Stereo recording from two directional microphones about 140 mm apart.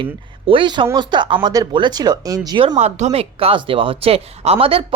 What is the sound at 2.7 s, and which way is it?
Speech, 55° right (ahead or behind).